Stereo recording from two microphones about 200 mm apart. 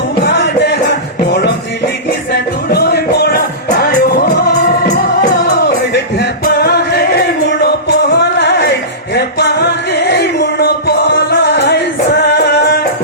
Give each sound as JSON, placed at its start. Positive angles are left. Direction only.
{"t": 0.3, "sound": "music", "side_deg": 60}
{"t": 2.3, "sound": "music", "side_deg": 55}